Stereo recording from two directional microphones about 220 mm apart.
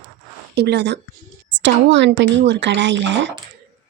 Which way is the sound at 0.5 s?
50° right (ahead or behind).